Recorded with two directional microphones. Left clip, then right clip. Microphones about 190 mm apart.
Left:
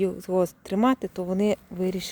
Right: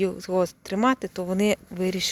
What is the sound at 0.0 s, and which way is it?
Speech, 15° left (ahead or behind).